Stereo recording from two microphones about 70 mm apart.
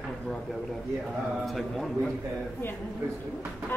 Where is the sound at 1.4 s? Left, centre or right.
Centre.